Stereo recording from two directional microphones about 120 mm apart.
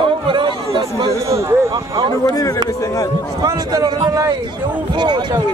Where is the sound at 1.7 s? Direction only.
45° right (ahead or behind).